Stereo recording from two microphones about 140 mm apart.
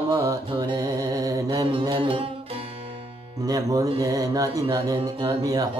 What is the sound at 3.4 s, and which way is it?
Music, 25° right (ahead or behind).